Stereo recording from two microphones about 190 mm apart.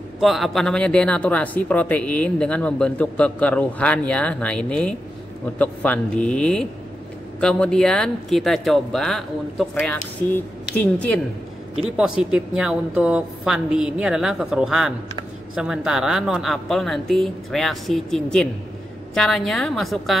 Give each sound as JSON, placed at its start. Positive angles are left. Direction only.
{"t": 0.2, "sound": "speech", "side_deg": 0}
{"t": 12.0, "sound": "speech", "side_deg": -5}